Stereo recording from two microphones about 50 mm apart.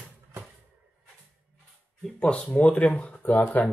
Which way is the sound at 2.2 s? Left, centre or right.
Left.